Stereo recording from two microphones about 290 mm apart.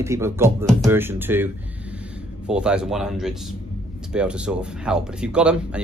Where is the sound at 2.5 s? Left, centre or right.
Centre.